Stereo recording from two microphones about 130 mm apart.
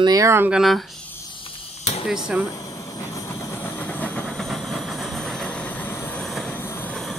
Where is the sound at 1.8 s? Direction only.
55° left (ahead or behind).